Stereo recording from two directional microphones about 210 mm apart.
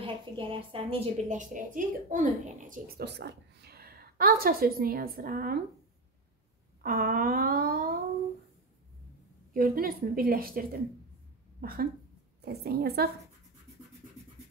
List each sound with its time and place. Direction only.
0.0 s a woman's voice: 25° right (ahead or behind); by 5.6 s 45° right (ahead or behind)
6.8 s a woman's voice: 45° right (ahead or behind)
9.5 s a woman's voice: 45° right (ahead or behind)
11.6 s a woman's voice: 45° right (ahead or behind)